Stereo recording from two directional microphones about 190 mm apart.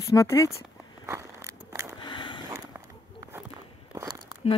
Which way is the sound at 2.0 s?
25° left (ahead or behind).